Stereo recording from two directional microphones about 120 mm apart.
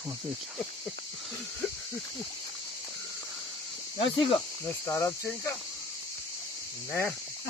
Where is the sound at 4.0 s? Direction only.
50° left (ahead or behind).